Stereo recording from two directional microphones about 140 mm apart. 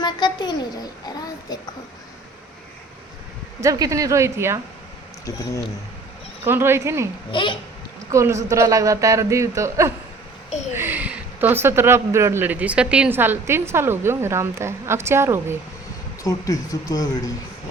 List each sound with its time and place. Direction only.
0.0 s a child's voice: 30° left (ahead or behind)
3.6 s speech: 25° right (ahead or behind)
6.4 s speech: 15° right (ahead or behind)
7.3 s a child's voice: 35° left (ahead or behind)
8.1 s speech: 20° right (ahead or behind)
16.2 s speech: 25° left (ahead or behind)